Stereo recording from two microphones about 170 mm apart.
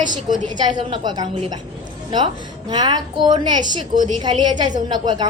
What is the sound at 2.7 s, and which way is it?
A woman's voice, 25° right (ahead or behind).